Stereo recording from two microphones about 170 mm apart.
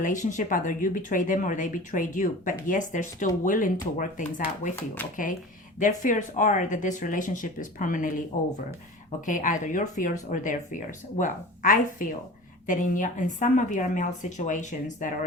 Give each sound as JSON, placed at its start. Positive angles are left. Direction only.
{"t": 0.0, "sound": "speech", "side_deg": 50}
{"t": 9.2, "sound": "speech", "side_deg": 50}